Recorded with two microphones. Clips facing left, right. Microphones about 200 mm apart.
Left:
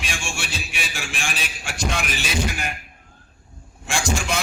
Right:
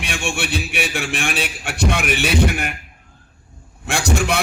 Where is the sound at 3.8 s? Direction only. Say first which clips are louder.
Right 5 dB; 60° right (ahead or behind).